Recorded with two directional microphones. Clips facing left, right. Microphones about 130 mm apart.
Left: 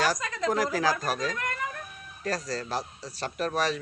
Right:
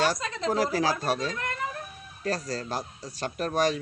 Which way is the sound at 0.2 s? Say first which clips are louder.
Even; 30° right (ahead or behind).